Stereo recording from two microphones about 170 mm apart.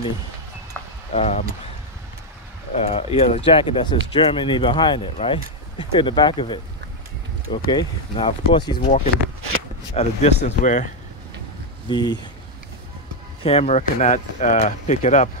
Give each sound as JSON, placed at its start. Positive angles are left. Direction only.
{"t": 1.1, "sound": "speech", "side_deg": 40}
{"t": 2.7, "sound": "speech", "side_deg": 35}
{"t": 9.9, "sound": "speech", "side_deg": 40}
{"t": 11.9, "sound": "speech", "side_deg": 25}
{"t": 13.4, "sound": "speech", "side_deg": 35}